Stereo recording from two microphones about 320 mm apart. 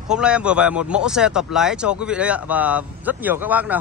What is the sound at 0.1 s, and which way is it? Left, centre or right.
Speech, centre.